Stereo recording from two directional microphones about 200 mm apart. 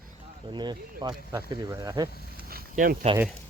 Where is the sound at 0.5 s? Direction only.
20° right (ahead or behind).